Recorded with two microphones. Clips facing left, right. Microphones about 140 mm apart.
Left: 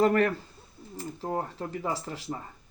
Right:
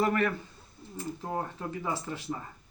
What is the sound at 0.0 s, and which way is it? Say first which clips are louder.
Speech: left 4 dB; 40° left (ahead or behind).